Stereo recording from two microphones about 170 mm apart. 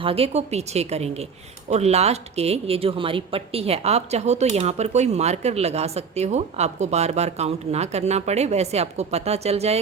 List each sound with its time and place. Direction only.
0.0 s speech: 35° right (ahead or behind)